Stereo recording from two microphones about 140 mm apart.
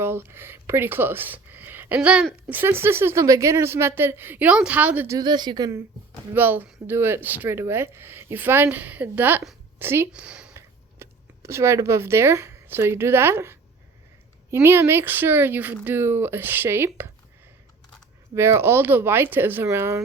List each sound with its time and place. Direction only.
0.0 s speech: 15° right (ahead or behind)
5.0 s speech: 30° right (ahead or behind)
6.3 s speech: 15° right (ahead or behind)
11.0 s speech: 20° right (ahead or behind)
18.3 s speech: 20° right (ahead or behind)